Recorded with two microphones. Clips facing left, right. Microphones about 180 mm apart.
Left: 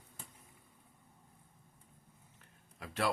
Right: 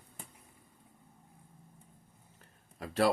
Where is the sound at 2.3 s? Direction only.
35° right (ahead or behind).